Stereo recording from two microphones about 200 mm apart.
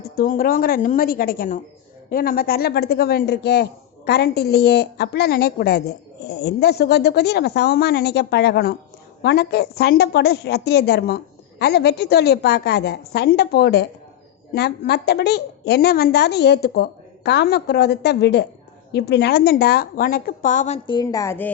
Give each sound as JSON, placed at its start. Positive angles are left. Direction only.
{"t": 0.2, "sound": "a woman's voice", "side_deg": 45}